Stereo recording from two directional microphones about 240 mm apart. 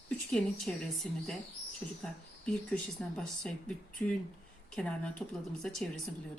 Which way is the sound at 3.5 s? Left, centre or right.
Centre.